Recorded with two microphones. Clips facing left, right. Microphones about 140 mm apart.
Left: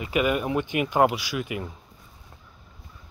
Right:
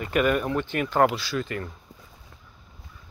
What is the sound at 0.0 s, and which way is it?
Speech, 5° left (ahead or behind).